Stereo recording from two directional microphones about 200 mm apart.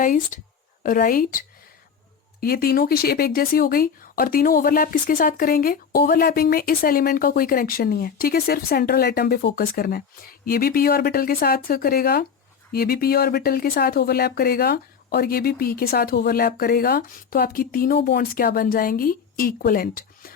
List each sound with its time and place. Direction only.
0.0 s speech: 40° left (ahead or behind)